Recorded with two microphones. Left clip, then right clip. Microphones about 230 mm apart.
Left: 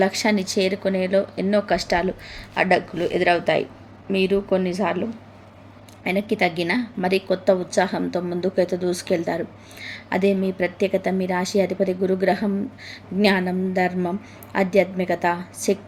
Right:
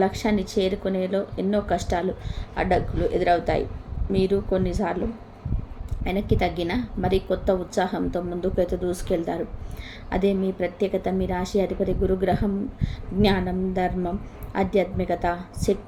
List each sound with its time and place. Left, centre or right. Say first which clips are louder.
0.0 s a woman's voice: left 3 dB; centre
6.3 s a woman's voice: left 3 dB; centre